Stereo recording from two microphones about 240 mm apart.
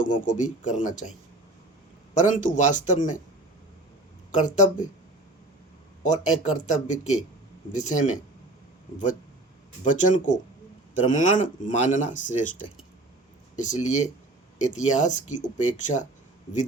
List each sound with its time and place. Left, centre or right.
0.0 s speech: left
2.1 s speech: left
4.4 s speech: left
6.0 s speech: left
9.8 s speech: left
13.6 s speech: left